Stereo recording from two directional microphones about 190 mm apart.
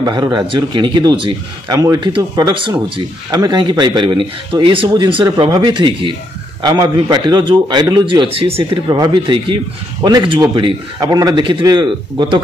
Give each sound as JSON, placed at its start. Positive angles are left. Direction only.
{"t": 0.0, "sound": "speech", "side_deg": -20}